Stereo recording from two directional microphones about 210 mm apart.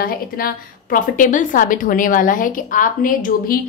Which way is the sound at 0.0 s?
45° left (ahead or behind).